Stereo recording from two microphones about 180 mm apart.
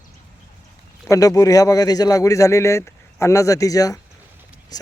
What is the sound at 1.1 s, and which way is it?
Speech, 20° left (ahead or behind).